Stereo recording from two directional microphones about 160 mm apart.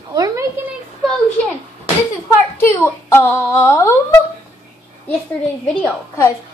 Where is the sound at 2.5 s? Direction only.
15° left (ahead or behind).